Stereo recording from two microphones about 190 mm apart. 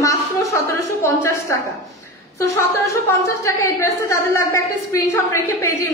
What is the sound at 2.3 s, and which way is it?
A woman's voice, 15° left (ahead or behind).